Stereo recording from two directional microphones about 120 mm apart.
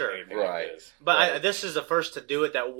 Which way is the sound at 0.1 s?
25° right (ahead or behind).